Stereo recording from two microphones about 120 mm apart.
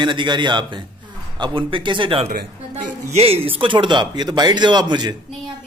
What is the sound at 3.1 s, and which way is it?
Speech, 55° right (ahead or behind).